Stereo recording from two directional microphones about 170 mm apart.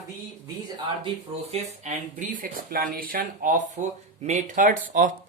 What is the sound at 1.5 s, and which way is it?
Speech, 45° right (ahead or behind).